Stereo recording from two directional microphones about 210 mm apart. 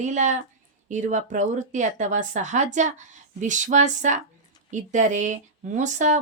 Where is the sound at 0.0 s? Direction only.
35° right (ahead or behind).